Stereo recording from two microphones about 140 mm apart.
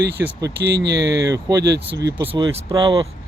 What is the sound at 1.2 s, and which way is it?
Speech, 25° right (ahead or behind).